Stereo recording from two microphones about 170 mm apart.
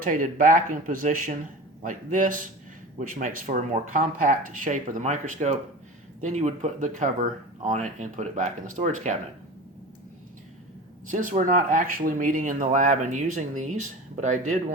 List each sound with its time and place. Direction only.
0.0 s speech: 50° right (ahead or behind)
11.1 s speech: 50° right (ahead or behind)